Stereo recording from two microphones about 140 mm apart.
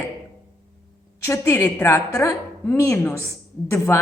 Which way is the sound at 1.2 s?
20° left (ahead or behind).